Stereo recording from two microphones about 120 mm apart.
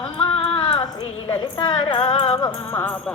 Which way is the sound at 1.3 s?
40° left (ahead or behind).